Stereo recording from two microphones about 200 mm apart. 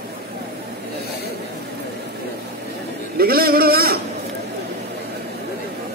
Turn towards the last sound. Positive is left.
turn(degrees=-50)  # may be behind; listen again after turning